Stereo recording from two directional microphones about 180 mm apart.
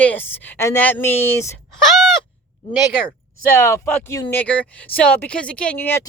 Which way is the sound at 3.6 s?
15° left (ahead or behind).